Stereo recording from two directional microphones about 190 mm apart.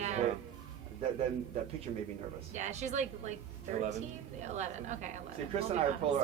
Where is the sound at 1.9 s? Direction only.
35° right (ahead or behind).